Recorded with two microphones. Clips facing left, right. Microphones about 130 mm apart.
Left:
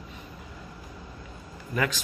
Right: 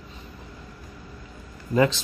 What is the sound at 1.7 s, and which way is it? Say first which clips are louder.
Speech: right 8 dB; 25° right (ahead or behind).